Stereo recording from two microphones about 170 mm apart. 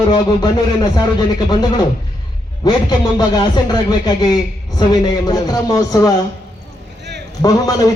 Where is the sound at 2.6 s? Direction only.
25° left (ahead or behind).